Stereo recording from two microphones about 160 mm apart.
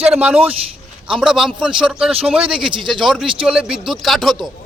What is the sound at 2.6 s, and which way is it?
Speech, 30° right (ahead or behind).